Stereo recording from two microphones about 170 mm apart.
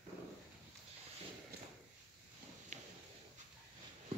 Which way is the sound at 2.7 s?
45° right (ahead or behind).